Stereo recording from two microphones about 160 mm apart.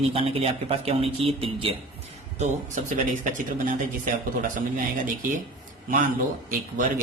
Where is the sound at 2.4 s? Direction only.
50° right (ahead or behind).